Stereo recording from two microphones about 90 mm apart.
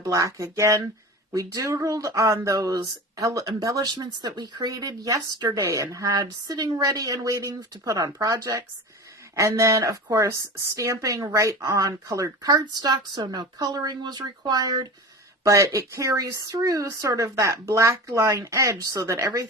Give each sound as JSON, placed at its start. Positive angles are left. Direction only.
{"t": 0.0, "sound": "speech", "side_deg": -35}
{"t": 4.7, "sound": "speech", "side_deg": -40}
{"t": 13.1, "sound": "speech", "side_deg": -55}
{"t": 15.4, "sound": "speech", "side_deg": -35}